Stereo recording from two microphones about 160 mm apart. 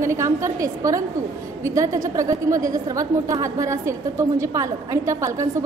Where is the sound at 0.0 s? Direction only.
20° right (ahead or behind).